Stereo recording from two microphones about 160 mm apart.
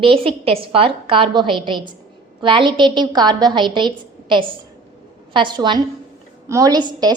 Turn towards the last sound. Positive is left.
turn(degrees=-25)  # may be behind; listen again after turning